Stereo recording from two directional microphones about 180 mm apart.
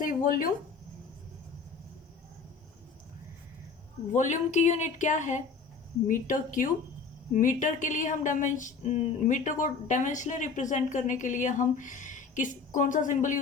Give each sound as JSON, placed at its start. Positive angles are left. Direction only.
{"t": 0.0, "sound": "speech", "side_deg": 50}
{"t": 4.1, "sound": "a woman's voice", "side_deg": 40}